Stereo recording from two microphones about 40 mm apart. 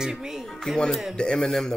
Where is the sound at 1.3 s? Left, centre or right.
Centre.